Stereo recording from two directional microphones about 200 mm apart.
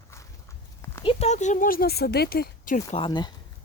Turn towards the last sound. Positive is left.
turn(degrees=25)  # may be behind; listen again after turning